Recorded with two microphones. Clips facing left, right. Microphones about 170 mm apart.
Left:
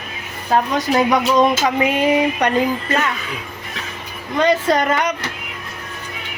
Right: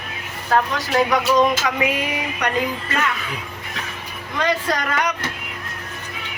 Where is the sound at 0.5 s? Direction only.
20° left (ahead or behind).